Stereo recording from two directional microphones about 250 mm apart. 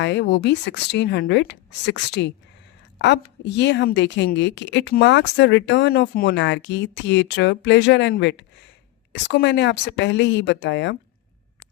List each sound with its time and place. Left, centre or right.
0.0 s a woman's voice: left